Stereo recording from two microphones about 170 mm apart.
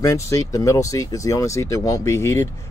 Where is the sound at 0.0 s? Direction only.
20° left (ahead or behind).